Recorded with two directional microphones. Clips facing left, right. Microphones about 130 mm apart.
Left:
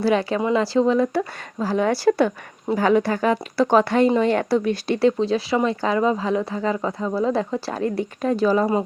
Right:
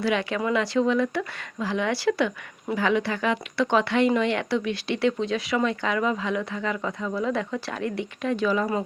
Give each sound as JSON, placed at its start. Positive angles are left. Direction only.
{"t": 0.0, "sound": "speech", "side_deg": 35}